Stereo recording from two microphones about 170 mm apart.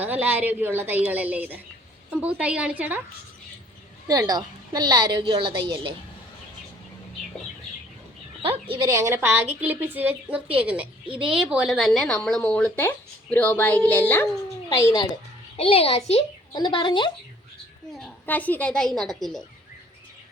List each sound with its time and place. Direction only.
0.0 s a woman's voice: 10° right (ahead or behind)
4.0 s a woman's voice: 20° right (ahead or behind)
8.4 s a woman's voice: 30° right (ahead or behind)
8.9 s a woman's voice: 15° right (ahead or behind); by 14.3 s 10° left (ahead or behind)
14.8 s a woman's voice: 20° left (ahead or behind)
15.5 s a woman's voice: 35° left (ahead or behind)
16.5 s a woman's voice: 25° left (ahead or behind)
17.9 s a woman's voice: 5° left (ahead or behind)